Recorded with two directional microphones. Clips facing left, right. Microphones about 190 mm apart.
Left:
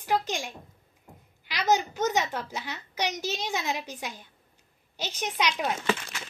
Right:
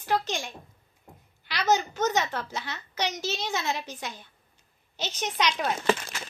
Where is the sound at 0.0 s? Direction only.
10° left (ahead or behind).